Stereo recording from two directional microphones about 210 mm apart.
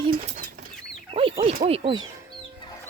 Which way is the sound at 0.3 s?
40° right (ahead or behind).